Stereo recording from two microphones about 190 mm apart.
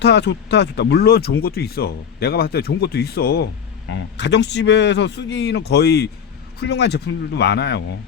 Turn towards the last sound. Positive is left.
turn(degrees=60)  # may be behind; listen again after turning